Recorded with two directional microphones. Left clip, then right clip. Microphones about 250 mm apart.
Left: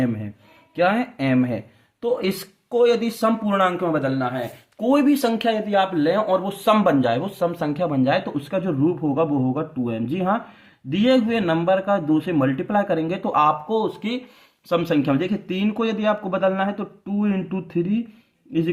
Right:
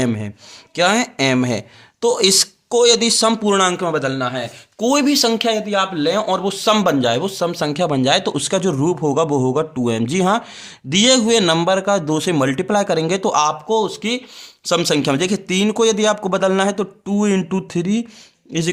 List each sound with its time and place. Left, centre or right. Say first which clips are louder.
0.8 s speech: right 4 dB; right
14.7 s speech: right 4 dB; right